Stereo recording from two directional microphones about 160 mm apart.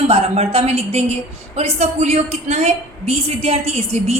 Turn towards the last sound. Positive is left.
turn(degrees=-40)  # may be behind; listen again after turning